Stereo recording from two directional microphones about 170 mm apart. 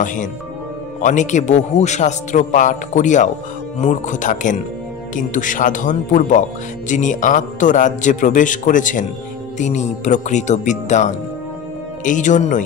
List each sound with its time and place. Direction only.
0.0 s speech: 50° left (ahead or behind)